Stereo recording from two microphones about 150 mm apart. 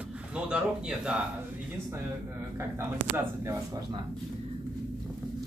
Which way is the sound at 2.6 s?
15° right (ahead or behind).